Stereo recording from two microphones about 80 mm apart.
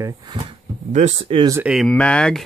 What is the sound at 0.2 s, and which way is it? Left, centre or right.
Speech, right.